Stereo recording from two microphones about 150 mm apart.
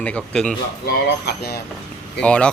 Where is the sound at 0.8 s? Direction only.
90° left.